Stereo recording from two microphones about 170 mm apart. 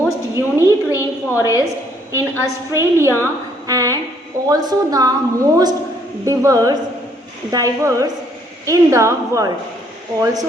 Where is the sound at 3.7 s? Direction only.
20° right (ahead or behind).